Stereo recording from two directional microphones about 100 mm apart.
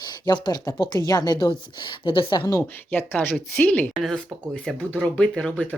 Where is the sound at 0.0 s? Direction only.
45° left (ahead or behind).